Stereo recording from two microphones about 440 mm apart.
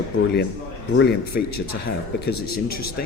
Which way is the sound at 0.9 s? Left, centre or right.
Left.